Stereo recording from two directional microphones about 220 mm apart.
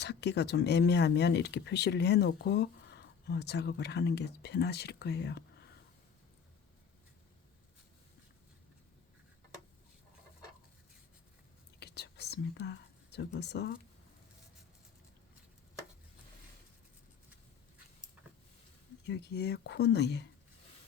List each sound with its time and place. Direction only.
0.0 s speech: 50° left (ahead or behind)
11.8 s whispering: 50° left (ahead or behind)
19.0 s speech: 50° left (ahead or behind)